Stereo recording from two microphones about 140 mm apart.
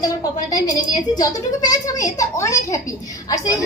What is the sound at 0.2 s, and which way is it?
A woman's voice, 25° left (ahead or behind).